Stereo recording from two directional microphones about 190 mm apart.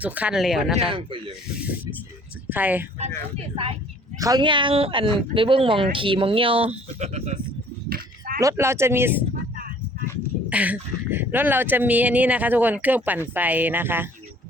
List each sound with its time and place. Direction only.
0.0 s speech: 5° right (ahead or behind)
0.9 s speech: 25° right (ahead or behind)
2.5 s speech: 10° right (ahead or behind)
3.0 s speech: 30° right (ahead or behind)
7.9 s a sound: 50° right (ahead or behind)
8.4 s speech: 15° right (ahead or behind)
10.5 s speech: 10° right (ahead or behind)